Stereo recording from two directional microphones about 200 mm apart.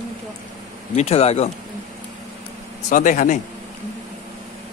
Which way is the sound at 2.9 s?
40° left (ahead or behind).